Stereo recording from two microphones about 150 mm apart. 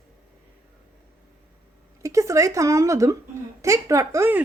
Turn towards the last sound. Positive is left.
turn(degrees=-15)  # may be behind; listen again after turning